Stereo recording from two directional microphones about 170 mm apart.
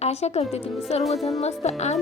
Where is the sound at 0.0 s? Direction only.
40° left (ahead or behind).